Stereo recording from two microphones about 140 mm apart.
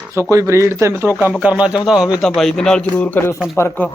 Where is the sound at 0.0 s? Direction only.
20° right (ahead or behind).